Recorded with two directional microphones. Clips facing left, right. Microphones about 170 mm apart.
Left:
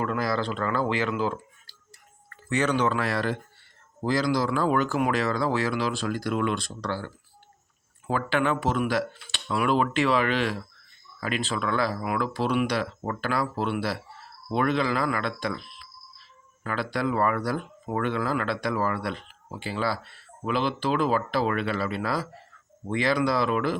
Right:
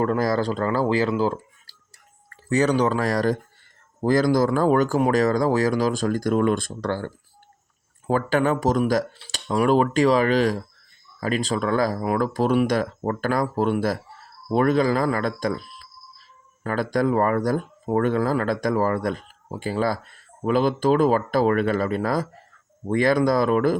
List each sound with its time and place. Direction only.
0.0 s speech: 40° right (ahead or behind)